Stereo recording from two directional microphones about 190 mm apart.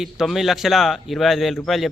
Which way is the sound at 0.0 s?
Centre (ahead or behind).